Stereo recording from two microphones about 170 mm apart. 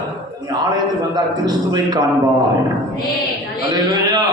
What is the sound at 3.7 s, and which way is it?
Speech, 25° right (ahead or behind).